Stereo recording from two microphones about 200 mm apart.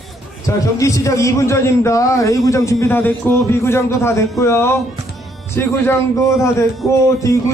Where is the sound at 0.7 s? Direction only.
15° left (ahead or behind).